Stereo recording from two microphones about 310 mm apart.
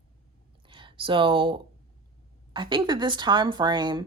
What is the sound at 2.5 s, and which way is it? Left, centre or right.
A woman's voice, centre.